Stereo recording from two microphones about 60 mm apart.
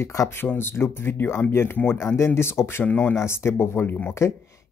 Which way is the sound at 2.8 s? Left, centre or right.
Left.